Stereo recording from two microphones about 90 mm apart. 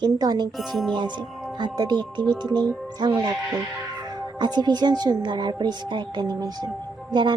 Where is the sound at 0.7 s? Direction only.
Centre (ahead or behind).